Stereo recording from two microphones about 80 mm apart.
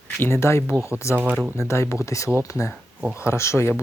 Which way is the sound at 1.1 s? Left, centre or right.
Centre.